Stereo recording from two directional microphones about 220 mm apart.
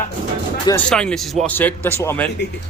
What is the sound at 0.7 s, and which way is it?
A man's voice, 5° left (ahead or behind).